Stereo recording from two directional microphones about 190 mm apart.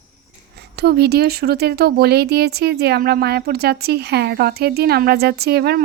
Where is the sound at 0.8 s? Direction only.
60° right (ahead or behind).